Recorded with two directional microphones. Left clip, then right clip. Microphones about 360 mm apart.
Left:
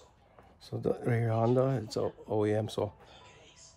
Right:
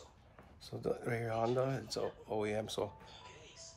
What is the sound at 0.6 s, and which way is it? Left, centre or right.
Speech, left.